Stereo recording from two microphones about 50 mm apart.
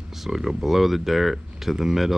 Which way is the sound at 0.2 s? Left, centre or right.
Centre.